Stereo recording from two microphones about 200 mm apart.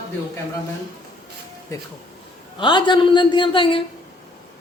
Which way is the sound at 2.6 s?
25° left (ahead or behind).